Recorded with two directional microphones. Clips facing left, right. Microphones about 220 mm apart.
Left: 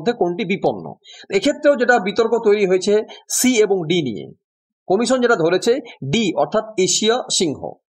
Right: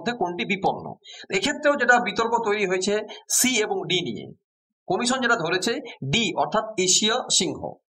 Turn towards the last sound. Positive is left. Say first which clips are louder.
# left 8 dB
turn(degrees=45)  # may be behind; listen again after turning